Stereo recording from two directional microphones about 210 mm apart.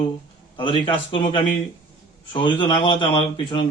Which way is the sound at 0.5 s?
25° left (ahead or behind).